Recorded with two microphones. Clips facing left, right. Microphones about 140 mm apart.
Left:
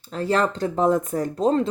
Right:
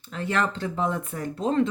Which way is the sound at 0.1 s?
35° left (ahead or behind).